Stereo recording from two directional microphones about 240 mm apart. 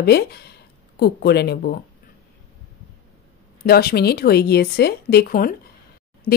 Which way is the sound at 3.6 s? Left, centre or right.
Left.